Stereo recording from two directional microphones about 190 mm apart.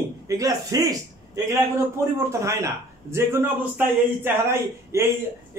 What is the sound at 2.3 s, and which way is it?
A man's voice, 15° right (ahead or behind).